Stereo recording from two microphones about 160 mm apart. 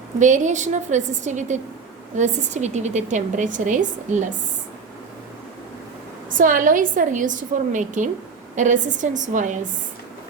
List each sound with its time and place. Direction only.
0.2 s a woman's voice: 50° right (ahead or behind)
6.3 s a woman's voice: 55° right (ahead or behind)